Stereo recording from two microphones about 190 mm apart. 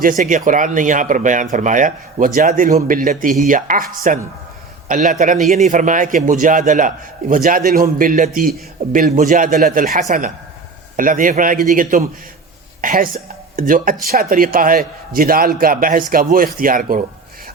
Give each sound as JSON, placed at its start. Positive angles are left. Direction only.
{"t": 0.0, "sound": "a man's voice", "side_deg": -45}